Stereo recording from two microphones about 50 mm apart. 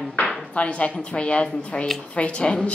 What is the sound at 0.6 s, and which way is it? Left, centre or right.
A woman's voice, left.